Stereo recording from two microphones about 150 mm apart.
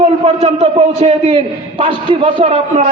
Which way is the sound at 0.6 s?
45° right (ahead or behind).